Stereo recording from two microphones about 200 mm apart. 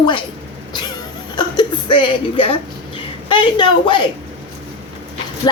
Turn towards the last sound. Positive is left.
turn(degrees=20)  # may be behind; listen again after turning